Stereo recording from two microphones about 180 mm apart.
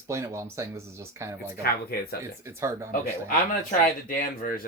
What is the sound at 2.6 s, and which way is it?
Speech, 15° right (ahead or behind).